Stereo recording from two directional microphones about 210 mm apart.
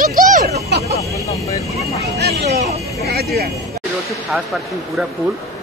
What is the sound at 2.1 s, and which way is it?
Vehicle, 50° right (ahead or behind).